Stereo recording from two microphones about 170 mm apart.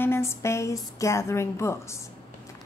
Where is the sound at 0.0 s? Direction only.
15° left (ahead or behind).